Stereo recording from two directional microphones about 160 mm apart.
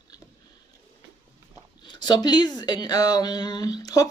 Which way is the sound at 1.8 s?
25° left (ahead or behind).